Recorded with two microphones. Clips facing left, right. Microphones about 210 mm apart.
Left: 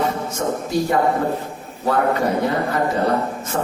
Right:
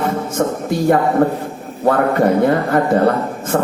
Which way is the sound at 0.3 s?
55° right (ahead or behind).